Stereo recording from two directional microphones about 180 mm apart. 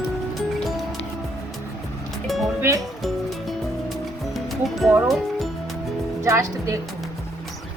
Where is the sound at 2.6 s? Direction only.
15° right (ahead or behind).